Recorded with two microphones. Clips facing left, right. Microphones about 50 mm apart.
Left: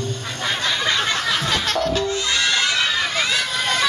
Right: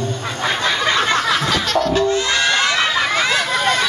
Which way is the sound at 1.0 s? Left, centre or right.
Right.